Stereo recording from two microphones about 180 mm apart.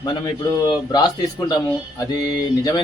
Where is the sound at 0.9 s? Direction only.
20° left (ahead or behind).